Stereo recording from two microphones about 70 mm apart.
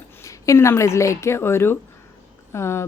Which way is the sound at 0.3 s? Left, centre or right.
Left.